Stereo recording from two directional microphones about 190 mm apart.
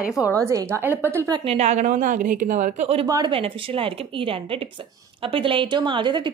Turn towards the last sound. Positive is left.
turn(degrees=-25)  # may be behind; listen again after turning